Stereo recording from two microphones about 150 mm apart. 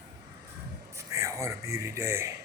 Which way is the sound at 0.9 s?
20° right (ahead or behind).